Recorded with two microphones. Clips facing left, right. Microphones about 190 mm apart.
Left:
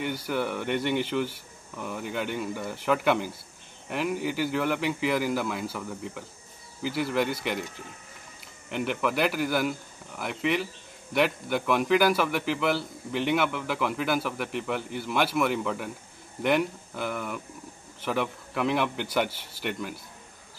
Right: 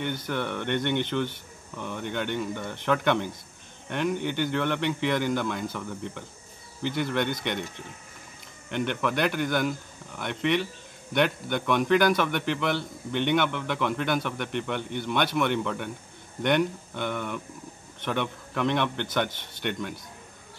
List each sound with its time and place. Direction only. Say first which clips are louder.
0.0 s a man's voice: left 1 dB; 5° left (ahead or behind)